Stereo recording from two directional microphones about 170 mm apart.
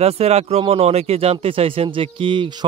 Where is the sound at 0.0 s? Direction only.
40° right (ahead or behind).